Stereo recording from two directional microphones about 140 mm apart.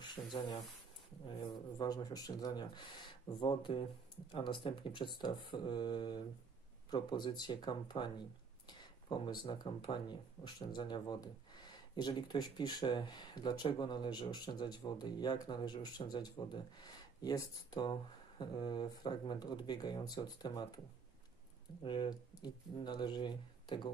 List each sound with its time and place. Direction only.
0.0 s speech: 30° left (ahead or behind)
1.8 s speech: 30° left (ahead or behind)
21.8 s speech: 35° left (ahead or behind)